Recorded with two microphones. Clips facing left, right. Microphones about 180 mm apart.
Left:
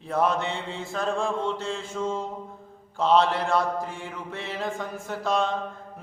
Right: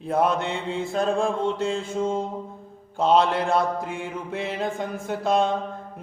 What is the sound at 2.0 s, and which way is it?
Mantra, 35° right (ahead or behind).